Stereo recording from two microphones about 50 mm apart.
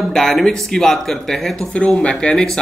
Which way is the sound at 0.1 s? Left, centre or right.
Centre.